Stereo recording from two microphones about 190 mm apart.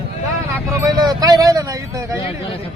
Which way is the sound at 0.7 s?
20° right (ahead or behind).